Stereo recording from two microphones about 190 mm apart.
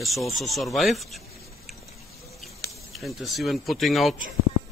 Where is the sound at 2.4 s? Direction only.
Centre (ahead or behind).